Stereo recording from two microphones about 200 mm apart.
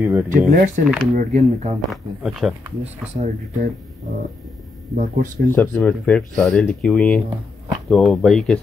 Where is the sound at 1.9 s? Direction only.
Centre (ahead or behind).